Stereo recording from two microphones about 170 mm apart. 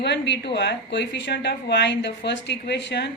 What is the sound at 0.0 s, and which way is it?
A woman's voice, 85° left.